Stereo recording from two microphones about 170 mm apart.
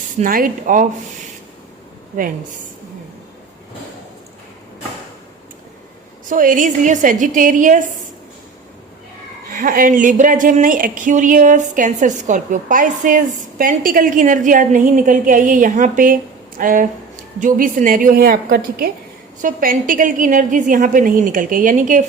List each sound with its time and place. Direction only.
0.2 s a woman's voice: 55° right (ahead or behind)
6.2 s a woman's voice: 50° right (ahead or behind)
9.5 s a woman's voice: 55° right (ahead or behind)
19.4 s a woman's voice: 55° right (ahead or behind)